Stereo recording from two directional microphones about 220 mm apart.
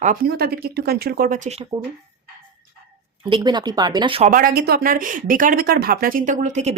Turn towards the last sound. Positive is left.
turn(degrees=-30)  # may be behind; listen again after turning